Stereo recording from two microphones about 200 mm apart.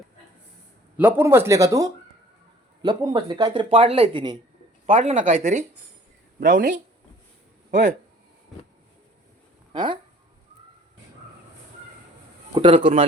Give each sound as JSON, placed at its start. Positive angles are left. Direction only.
{"t": 0.9, "sound": "speech", "side_deg": -10}
{"t": 4.9, "sound": "speech", "side_deg": -40}
{"t": 7.7, "sound": "speech", "side_deg": -40}
{"t": 9.7, "sound": "speech", "side_deg": -25}
{"t": 12.5, "sound": "speech", "side_deg": -25}